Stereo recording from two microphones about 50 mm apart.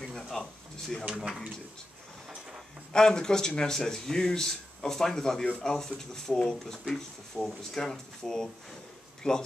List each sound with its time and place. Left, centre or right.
0.0 s speech: centre
1.0 s speech: centre
2.9 s speech: centre